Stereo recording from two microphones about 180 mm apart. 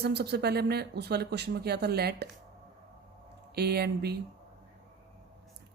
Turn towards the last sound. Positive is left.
turn(degrees=-65)  # may be behind; listen again after turning